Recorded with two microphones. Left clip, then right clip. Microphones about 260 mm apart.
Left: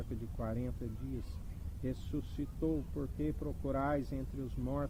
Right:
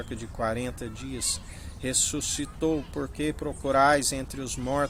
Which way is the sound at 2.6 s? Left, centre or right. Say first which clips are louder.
Right 9 dB; centre.